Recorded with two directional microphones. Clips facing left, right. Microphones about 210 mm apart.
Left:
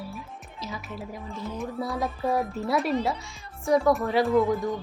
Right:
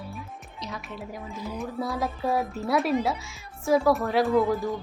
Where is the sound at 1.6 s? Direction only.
Centre (ahead or behind).